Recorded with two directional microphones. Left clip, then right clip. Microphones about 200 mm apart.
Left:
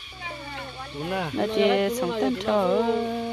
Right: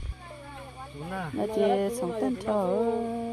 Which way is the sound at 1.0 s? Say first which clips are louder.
Left 7 dB; 40° left (ahead or behind).